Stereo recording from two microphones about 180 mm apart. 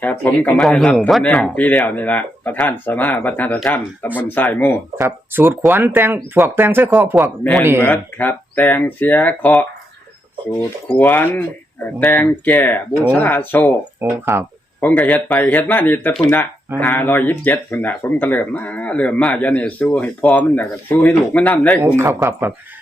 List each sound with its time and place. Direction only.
0.0 s speech: 10° left (ahead or behind)
4.9 s speech: 15° right (ahead or behind)
7.8 s speech: 10° left (ahead or behind)
10.9 s speech: 10° left (ahead or behind)
14.0 s speech: 10° right (ahead or behind)
14.8 s speech: 10° left (ahead or behind)
21.8 s speech: 15° right (ahead or behind)